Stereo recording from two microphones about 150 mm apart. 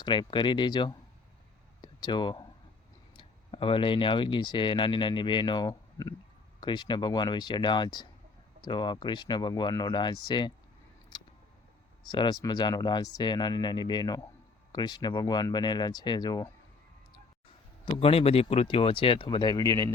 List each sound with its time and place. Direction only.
0.0 s speech: 30° left (ahead or behind)
11.1 s music: 30° left (ahead or behind)
12.1 s speech: 30° left (ahead or behind)
17.9 s speech: 40° left (ahead or behind); by 19.9 s 20° left (ahead or behind)